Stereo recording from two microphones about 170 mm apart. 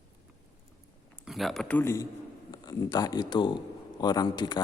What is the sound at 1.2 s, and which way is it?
A man's voice, centre (ahead or behind).